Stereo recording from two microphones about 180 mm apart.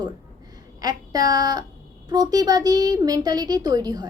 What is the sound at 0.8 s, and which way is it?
A woman's voice, 20° right (ahead or behind).